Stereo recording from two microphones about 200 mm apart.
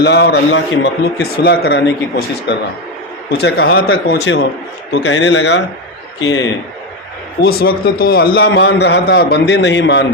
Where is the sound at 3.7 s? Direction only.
90° left.